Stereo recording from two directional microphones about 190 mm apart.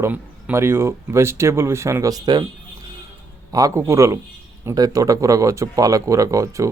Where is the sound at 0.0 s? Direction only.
10° right (ahead or behind).